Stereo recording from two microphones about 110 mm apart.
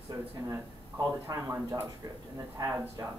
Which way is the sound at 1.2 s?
30° right (ahead or behind).